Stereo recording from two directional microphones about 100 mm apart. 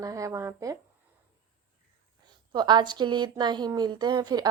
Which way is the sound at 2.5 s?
50° right (ahead or behind).